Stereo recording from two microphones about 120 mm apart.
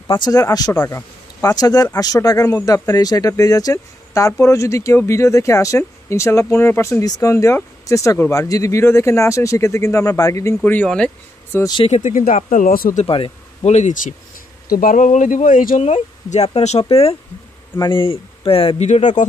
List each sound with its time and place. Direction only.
0.1 s speech: 35° left (ahead or behind)
10.6 s speech: 10° left (ahead or behind)
11.8 s speech: 80° left
13.0 s speech: 50° left (ahead or behind)
13.7 s speech: 80° left; by 17.2 s 55° left (ahead or behind)
17.7 s speech: 40° left (ahead or behind)
18.9 s speech: 80° left